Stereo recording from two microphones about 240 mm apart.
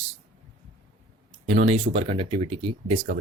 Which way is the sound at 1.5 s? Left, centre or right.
Right.